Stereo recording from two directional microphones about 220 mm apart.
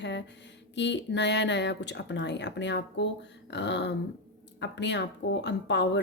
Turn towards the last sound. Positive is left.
turn(degrees=50)  # may be behind; listen again after turning